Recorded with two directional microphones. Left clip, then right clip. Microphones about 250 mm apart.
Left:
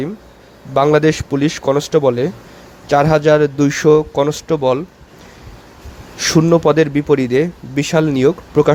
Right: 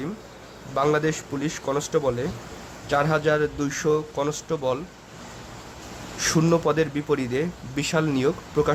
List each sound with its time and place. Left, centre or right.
0.9 s speech: left
6.1 s speech: centre